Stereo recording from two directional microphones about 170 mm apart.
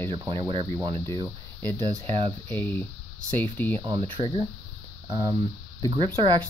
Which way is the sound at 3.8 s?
25° right (ahead or behind).